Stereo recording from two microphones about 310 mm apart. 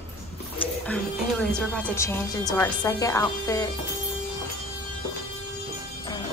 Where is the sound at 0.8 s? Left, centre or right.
Centre.